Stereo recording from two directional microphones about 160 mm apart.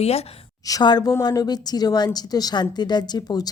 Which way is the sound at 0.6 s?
25° left (ahead or behind).